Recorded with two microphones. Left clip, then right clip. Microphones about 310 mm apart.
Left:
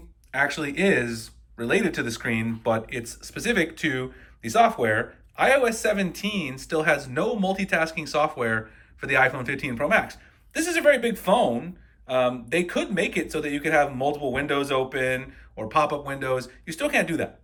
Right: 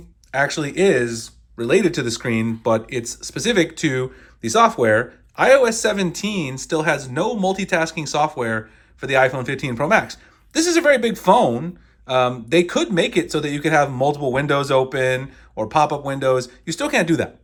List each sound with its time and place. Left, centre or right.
0.3 s speech: centre